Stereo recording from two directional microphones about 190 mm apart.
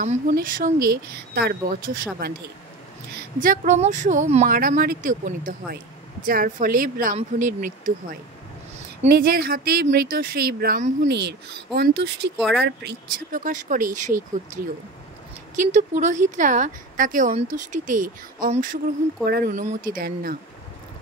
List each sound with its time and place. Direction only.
0.0 s a woman's voice: 45° right (ahead or behind)
3.3 s a woman's voice: 45° right (ahead or behind); by 12.3 s 60° right (ahead or behind)
12.4 s speech: centre (ahead or behind)
12.6 s speech: 65° right (ahead or behind)
13.3 s a woman's voice: 45° right (ahead or behind)
15.5 s a woman's voice: 40° right (ahead or behind)